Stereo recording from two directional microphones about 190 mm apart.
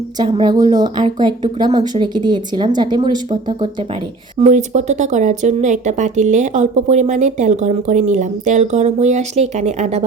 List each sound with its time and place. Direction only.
0.2 s speech: 25° right (ahead or behind)
4.4 s speech: 35° right (ahead or behind)